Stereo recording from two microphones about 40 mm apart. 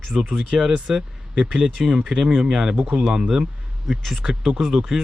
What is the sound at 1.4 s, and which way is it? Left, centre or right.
Speech, right.